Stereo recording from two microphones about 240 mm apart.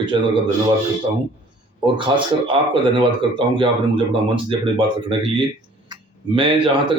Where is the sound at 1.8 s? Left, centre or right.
Right.